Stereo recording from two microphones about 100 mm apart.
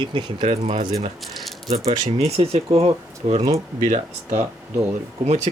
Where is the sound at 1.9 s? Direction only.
85° right.